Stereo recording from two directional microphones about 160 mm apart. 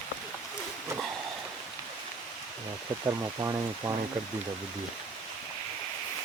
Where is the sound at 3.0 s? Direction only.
20° right (ahead or behind).